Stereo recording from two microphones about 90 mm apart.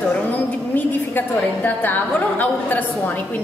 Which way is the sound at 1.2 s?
20° left (ahead or behind).